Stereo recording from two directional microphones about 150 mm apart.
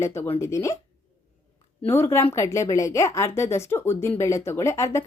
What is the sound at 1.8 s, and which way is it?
Speech, 15° left (ahead or behind).